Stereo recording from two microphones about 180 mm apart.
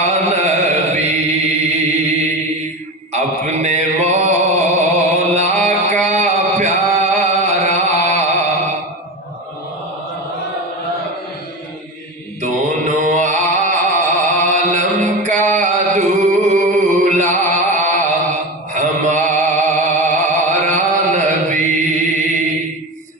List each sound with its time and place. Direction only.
0.0 s chant: 35° right (ahead or behind)
3.1 s mantra: 40° right (ahead or behind)
6.0 s chant: 40° right (ahead or behind)
12.4 s mantra: 40° right (ahead or behind)
15.5 s a sound: 40° right (ahead or behind)
20.1 s chant: 45° right (ahead or behind)